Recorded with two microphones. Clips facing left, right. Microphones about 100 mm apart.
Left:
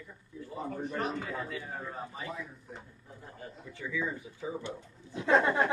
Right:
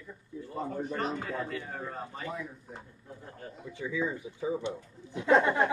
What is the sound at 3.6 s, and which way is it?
Speech, 20° right (ahead or behind).